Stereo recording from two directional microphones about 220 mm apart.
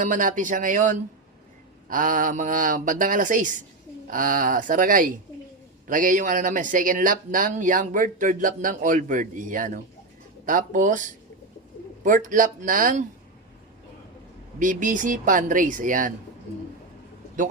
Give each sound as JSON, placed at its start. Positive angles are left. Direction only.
{"t": 0.0, "sound": "speech", "side_deg": -35}
{"t": 12.0, "sound": "speech", "side_deg": -35}
{"t": 14.6, "sound": "speech", "side_deg": -35}